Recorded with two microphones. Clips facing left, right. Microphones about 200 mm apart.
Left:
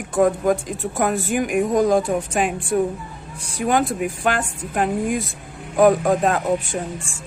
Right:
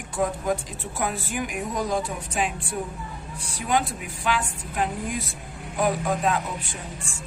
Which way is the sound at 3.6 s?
50° left (ahead or behind).